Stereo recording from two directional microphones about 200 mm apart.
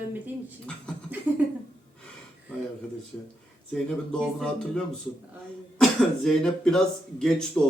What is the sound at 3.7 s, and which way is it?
Speech, 5° left (ahead or behind).